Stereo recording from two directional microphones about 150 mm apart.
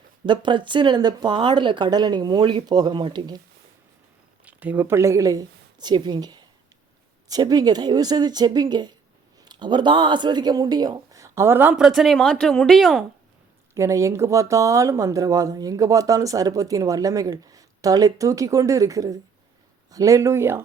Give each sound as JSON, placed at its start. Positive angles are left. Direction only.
{"t": 0.3, "sound": "speech", "side_deg": -30}
{"t": 4.4, "sound": "a woman's voice", "side_deg": -10}
{"t": 11.8, "sound": "speech", "side_deg": 0}
{"t": 13.7, "sound": "speech", "side_deg": -20}